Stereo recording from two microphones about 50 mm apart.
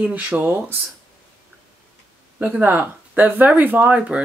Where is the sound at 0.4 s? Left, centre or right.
Right.